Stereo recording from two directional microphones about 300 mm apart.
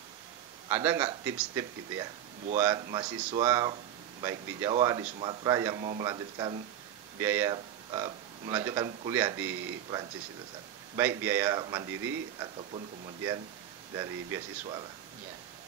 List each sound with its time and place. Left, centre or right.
0.7 s speech: centre
11.0 s speech: centre